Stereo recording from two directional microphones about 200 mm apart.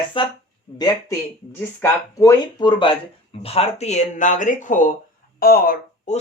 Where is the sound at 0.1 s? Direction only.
25° left (ahead or behind).